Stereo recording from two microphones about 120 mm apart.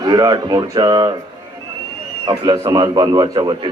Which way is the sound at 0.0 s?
35° right (ahead or behind).